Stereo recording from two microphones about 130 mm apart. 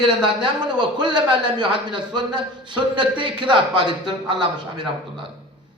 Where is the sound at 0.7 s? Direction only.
40° right (ahead or behind).